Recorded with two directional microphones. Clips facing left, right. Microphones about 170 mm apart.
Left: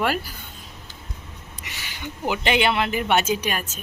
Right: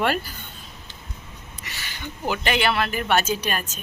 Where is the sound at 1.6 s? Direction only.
15° left (ahead or behind).